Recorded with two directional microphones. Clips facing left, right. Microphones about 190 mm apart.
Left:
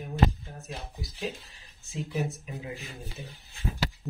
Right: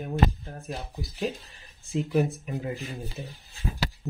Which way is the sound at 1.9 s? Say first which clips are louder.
Right 7 dB; 55° right (ahead or behind).